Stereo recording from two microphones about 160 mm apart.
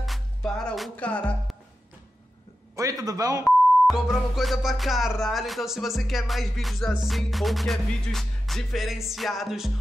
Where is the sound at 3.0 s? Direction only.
20° right (ahead or behind).